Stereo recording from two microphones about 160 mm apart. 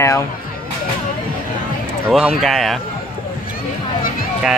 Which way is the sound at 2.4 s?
Centre (ahead or behind).